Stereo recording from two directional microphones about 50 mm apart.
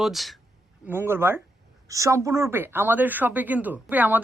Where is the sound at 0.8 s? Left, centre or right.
Right.